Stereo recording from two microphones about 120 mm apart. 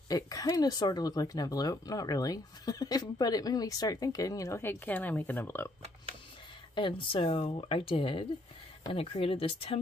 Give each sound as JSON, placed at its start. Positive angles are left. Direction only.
{"t": 0.1, "sound": "speech", "side_deg": 30}
{"t": 6.7, "sound": "speech", "side_deg": 45}